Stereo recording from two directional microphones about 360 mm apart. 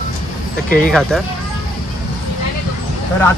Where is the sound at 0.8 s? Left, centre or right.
Centre.